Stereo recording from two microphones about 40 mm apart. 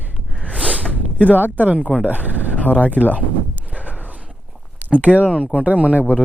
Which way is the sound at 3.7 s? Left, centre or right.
Right.